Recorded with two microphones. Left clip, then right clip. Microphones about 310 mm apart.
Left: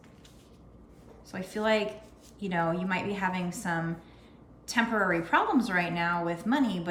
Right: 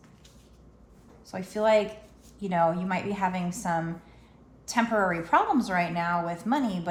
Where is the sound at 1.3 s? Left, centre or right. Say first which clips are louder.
Right 4 dB; centre.